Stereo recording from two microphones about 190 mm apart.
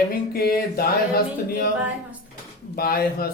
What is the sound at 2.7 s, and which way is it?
Speech, 55° left (ahead or behind).